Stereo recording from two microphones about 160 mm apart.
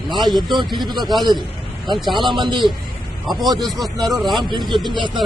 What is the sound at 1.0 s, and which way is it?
Speech, centre (ahead or behind).